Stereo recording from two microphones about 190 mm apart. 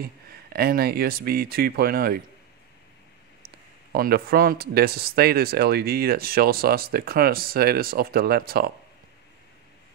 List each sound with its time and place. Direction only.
0.0 s speech: 55° right (ahead or behind)
3.9 s speech: 50° right (ahead or behind)